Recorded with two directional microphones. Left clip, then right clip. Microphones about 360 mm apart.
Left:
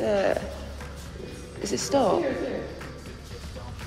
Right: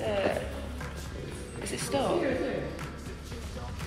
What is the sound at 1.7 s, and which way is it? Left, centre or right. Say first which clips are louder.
Speech: left 6 dB; centre.